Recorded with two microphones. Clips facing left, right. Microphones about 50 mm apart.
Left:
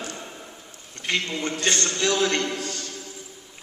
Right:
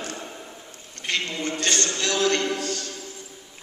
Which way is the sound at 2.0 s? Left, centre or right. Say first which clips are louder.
Even; centre.